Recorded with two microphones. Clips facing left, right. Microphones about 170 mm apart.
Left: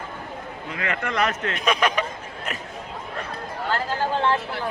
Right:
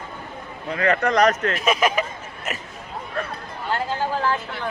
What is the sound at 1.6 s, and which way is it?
Speech, 5° right (ahead or behind).